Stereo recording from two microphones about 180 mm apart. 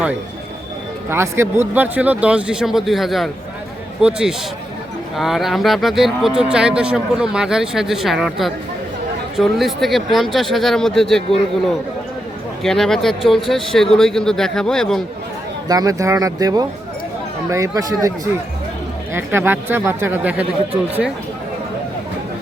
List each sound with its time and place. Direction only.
1.1 s speech: 15° right (ahead or behind); by 11.3 s centre (ahead or behind)
12.6 s speech: centre (ahead or behind)
15.7 s speech: 20° right (ahead or behind)
19.1 s speech: 15° right (ahead or behind)